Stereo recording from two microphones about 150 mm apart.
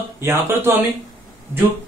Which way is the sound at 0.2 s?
15° right (ahead or behind).